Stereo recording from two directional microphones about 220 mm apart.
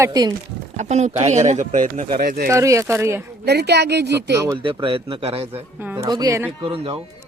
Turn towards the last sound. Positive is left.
turn(degrees=-25)  # may be behind; listen again after turning